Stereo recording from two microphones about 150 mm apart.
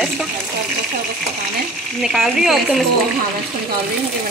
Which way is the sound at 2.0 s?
Centre (ahead or behind).